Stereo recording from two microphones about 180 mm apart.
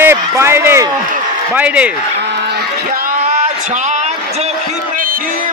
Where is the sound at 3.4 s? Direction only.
40° right (ahead or behind).